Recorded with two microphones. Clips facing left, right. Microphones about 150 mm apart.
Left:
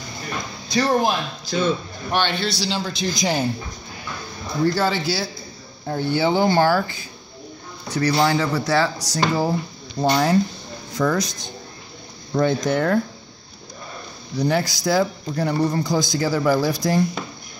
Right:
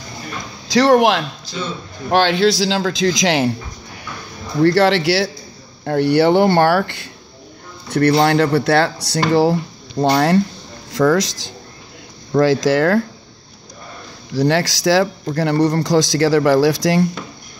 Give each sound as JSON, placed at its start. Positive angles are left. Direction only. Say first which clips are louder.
{"t": 0.7, "sound": "a man's voice", "louder": "right 7 dB", "side_deg": -90}
{"t": 4.6, "sound": "a man's voice", "louder": "right 8 dB", "side_deg": -80}
{"t": 10.9, "sound": "a man's voice", "louder": "right 6 dB", "side_deg": -90}
{"t": 14.3, "sound": "a man's voice", "louder": "right 5 dB", "side_deg": -90}